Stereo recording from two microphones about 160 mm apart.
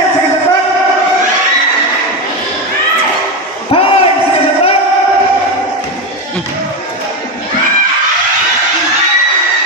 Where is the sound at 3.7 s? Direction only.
35° left (ahead or behind).